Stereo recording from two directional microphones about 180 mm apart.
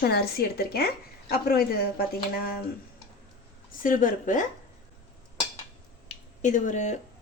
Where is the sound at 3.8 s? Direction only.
45° left (ahead or behind).